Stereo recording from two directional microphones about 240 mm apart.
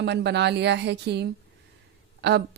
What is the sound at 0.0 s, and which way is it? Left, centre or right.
A woman's voice, right.